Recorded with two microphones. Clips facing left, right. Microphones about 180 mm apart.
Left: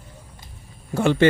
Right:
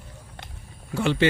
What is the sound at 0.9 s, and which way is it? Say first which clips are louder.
Speech: left 4 dB; 50° left (ahead or behind).